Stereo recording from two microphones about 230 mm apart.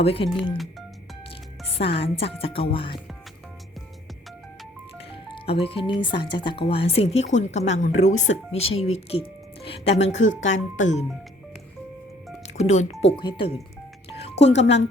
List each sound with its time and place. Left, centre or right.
0.0 s speech: left
2.0 s speech: left
4.9 s speech: left
12.5 s speech: left
14.2 s music: left